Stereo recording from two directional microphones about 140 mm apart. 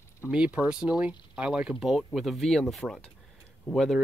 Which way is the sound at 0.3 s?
10° right (ahead or behind).